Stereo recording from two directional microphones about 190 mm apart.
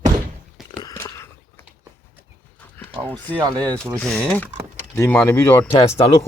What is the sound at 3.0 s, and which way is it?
Speech, 10° left (ahead or behind).